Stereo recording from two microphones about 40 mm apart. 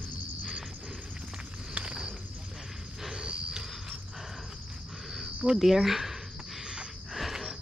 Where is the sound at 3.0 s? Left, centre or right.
Centre.